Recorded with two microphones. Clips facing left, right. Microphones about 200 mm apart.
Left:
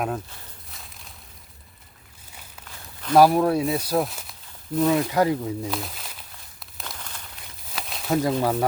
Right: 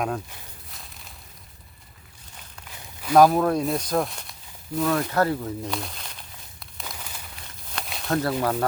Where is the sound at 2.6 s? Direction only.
10° right (ahead or behind).